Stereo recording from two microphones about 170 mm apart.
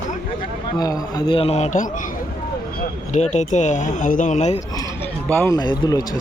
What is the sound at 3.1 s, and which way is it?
Speech, 45° left (ahead or behind).